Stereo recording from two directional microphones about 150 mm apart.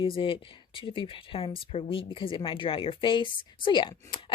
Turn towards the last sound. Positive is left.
turn(degrees=30)  # may be behind; listen again after turning